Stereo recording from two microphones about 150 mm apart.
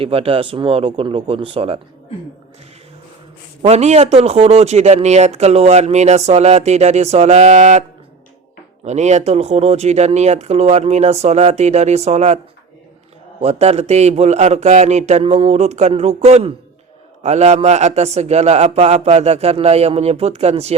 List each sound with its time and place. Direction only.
0.0 s speech: 40° right (ahead or behind)
3.6 s speech: 45° right (ahead or behind)
13.4 s speech: 45° right (ahead or behind)